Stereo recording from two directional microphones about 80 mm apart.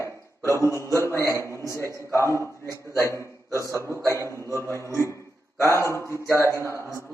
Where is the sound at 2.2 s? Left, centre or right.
Right.